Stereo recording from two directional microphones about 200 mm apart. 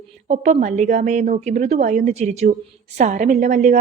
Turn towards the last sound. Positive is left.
turn(degrees=-35)  # may be behind; listen again after turning